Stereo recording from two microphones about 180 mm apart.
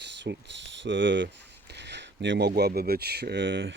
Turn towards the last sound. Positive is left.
turn(degrees=-85)